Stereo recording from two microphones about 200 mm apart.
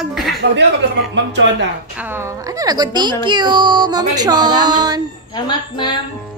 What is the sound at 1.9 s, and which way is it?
A woman's voice, 10° right (ahead or behind).